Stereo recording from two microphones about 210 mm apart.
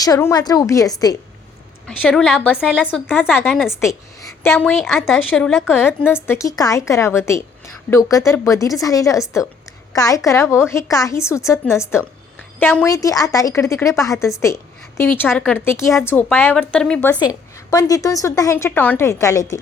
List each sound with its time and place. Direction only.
0.0 s a woman's voice: 15° left (ahead or behind)
2.0 s a woman's voice: 5° left (ahead or behind)
3.7 s a woman's voice: 15° left (ahead or behind)
4.5 s a woman's voice: centre (ahead or behind)
6.0 s a woman's voice: 10° left (ahead or behind)
17.2 s a woman's voice: 20° left (ahead or behind)